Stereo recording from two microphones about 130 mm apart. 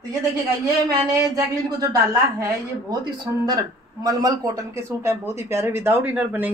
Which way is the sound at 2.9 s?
30° right (ahead or behind).